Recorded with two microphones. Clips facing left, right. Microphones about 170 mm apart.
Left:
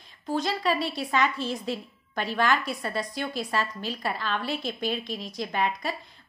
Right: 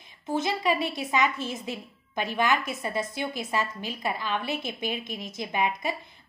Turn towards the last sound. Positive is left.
turn(degrees=-15)  # may be behind; listen again after turning